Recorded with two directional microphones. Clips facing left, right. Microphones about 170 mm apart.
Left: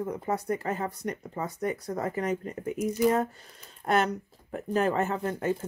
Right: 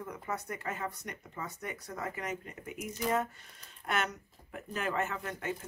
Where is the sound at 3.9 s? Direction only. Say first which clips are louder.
Left 9 dB; 35° left (ahead or behind).